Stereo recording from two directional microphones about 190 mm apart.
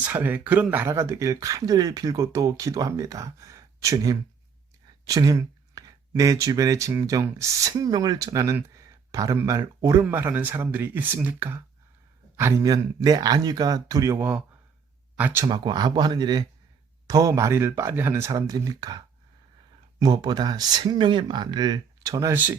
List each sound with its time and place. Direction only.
0.0 s speech: 10° right (ahead or behind)
15.4 s speech: 20° right (ahead or behind)